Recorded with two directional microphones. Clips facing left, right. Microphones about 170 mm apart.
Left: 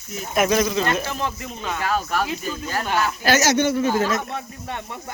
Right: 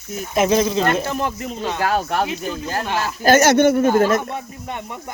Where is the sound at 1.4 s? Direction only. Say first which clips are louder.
Right 5 dB; 30° right (ahead or behind).